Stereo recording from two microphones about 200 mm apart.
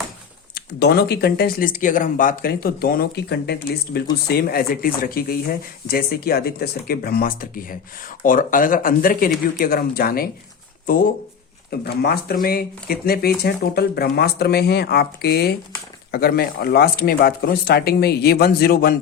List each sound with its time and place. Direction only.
0.5 s speech: 55° left (ahead or behind)